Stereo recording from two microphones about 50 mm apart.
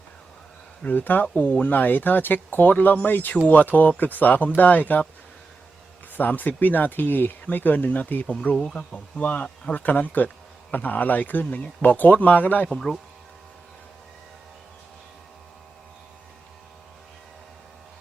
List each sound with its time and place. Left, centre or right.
0.9 s speech: left
6.1 s speech: left
8.7 s speech: left
12.6 s speech: centre